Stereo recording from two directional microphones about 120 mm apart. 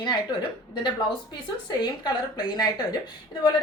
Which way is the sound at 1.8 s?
35° left (ahead or behind).